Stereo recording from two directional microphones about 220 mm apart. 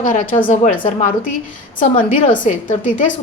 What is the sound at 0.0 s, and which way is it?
A woman's voice, 35° left (ahead or behind).